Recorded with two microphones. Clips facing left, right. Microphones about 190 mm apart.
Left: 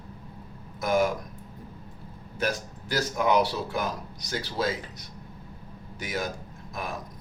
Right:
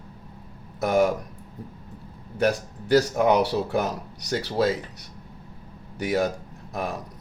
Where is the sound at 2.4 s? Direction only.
60° right (ahead or behind).